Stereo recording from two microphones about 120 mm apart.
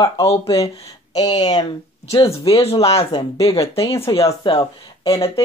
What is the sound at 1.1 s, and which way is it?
Speech, 35° left (ahead or behind).